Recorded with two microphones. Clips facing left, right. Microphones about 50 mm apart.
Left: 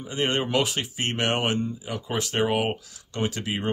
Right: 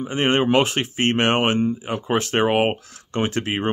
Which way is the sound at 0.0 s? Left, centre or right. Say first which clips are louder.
Right 6 dB; right.